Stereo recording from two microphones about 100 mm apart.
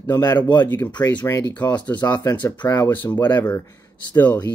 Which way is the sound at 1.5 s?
15° left (ahead or behind).